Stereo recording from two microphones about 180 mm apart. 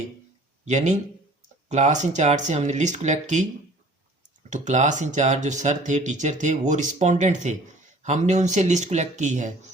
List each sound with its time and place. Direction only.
0.6 s speech: 40° right (ahead or behind)
4.4 s speech: 40° right (ahead or behind)